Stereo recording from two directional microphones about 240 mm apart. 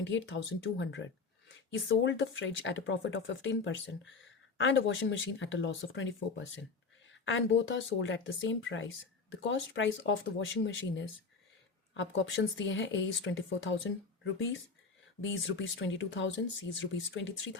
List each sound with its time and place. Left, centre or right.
0.0 s speech: left